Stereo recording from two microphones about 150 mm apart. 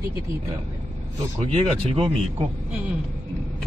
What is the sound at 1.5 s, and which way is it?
Speech, 40° right (ahead or behind).